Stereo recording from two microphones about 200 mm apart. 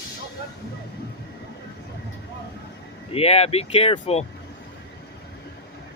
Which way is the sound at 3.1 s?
30° left (ahead or behind).